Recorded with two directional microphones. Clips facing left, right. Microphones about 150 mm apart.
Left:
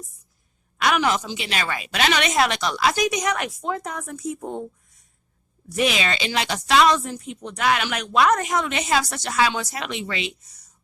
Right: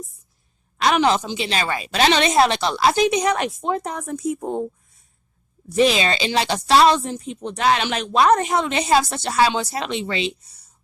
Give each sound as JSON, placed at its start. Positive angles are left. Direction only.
{"t": 0.8, "sound": "a woman's voice", "side_deg": -30}
{"t": 5.6, "sound": "a woman's voice", "side_deg": -30}